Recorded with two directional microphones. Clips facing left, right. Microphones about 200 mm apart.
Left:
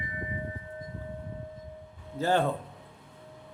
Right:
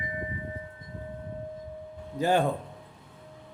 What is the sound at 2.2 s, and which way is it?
Speech, 15° right (ahead or behind).